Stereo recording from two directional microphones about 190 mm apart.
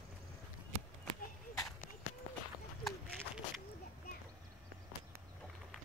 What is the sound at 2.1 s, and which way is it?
Run, 35° left (ahead or behind).